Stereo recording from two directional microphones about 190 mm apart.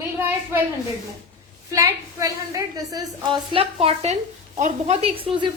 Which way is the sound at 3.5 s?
30° right (ahead or behind).